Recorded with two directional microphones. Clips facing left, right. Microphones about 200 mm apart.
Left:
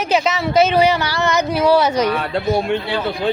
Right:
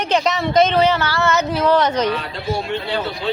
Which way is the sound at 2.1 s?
55° left (ahead or behind).